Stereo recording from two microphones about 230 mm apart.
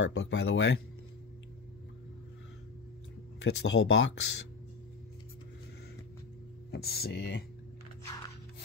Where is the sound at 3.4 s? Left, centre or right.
Left.